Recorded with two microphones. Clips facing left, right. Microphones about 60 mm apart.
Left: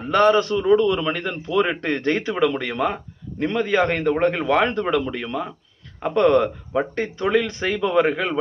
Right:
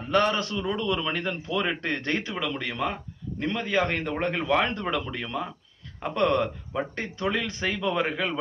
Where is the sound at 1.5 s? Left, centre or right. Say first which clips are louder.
Left 8 dB; centre.